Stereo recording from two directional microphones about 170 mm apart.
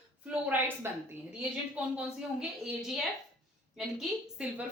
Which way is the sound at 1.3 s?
5° right (ahead or behind).